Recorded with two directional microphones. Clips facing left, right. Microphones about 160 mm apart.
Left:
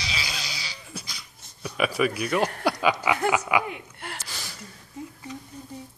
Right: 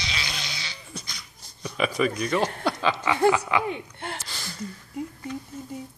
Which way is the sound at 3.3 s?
10° left (ahead or behind).